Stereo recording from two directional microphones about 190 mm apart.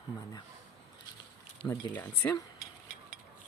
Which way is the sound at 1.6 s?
20° left (ahead or behind).